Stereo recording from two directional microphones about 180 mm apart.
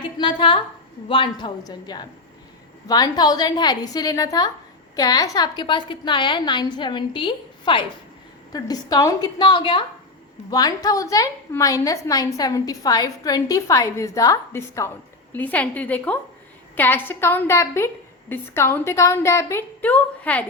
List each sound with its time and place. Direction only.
0.2 s a woman's voice: 25° left (ahead or behind); by 20.4 s 10° left (ahead or behind)